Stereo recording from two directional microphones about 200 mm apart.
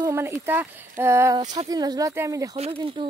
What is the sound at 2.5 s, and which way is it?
Speech, 30° right (ahead or behind).